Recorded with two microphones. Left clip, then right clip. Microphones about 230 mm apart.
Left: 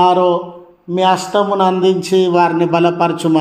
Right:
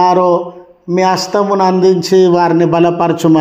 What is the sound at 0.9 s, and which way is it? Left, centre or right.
A man's voice, right.